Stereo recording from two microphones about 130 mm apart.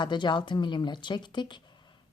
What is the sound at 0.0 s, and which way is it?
A woman's voice, 35° left (ahead or behind).